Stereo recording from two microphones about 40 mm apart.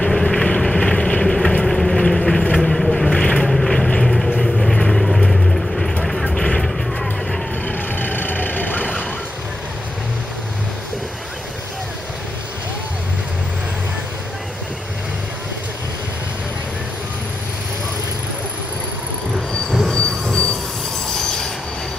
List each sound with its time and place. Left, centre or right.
0.0 s vehicle: centre
3.1 s boat: left
3.4 s vehicle: centre
6.2 s vehicle: left
6.6 s music: centre
7.6 s vehicle: left
21.1 s train: centre